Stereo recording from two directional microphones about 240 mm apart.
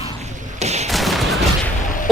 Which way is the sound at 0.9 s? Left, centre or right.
Centre.